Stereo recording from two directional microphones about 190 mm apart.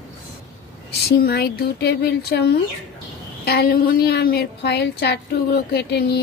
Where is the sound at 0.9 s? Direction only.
55° left (ahead or behind).